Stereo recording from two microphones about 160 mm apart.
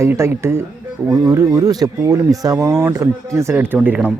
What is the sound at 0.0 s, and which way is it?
Speech, 15° right (ahead or behind).